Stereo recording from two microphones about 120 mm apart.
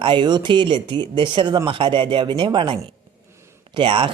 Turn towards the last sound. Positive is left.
turn(degrees=-45)  # may be behind; listen again after turning